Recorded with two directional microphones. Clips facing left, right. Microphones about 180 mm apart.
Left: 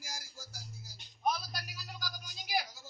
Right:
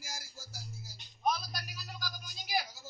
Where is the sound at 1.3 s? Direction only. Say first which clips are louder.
Right 1 dB; 10° left (ahead or behind).